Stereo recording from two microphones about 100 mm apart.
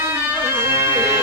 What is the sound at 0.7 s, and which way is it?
Bagpipes, 25° right (ahead or behind).